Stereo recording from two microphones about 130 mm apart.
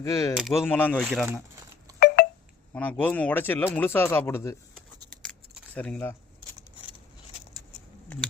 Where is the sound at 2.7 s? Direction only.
15° left (ahead or behind).